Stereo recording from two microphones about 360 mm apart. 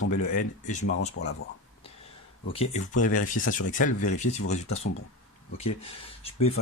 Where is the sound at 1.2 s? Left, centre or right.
Left.